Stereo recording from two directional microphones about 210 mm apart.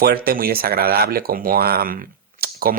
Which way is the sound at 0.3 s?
45° right (ahead or behind).